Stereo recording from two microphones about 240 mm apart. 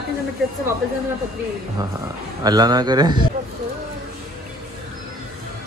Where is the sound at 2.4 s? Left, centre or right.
Centre.